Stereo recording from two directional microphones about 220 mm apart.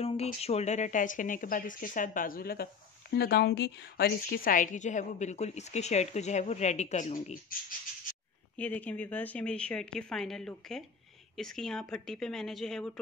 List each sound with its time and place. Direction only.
0.0 s speech: 30° left (ahead or behind)
8.5 s speech: 5° left (ahead or behind)